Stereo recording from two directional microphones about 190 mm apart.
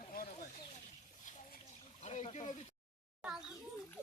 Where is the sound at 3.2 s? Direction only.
5° right (ahead or behind).